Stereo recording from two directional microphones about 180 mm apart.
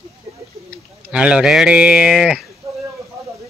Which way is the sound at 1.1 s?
5° right (ahead or behind).